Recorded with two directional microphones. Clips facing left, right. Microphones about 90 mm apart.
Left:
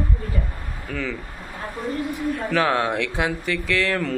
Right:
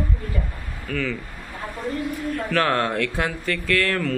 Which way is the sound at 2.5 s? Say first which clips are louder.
Even; 10° left (ahead or behind).